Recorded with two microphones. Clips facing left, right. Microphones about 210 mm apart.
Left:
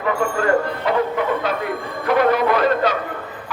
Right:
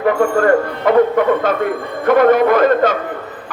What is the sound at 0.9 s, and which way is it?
Speech, 50° right (ahead or behind).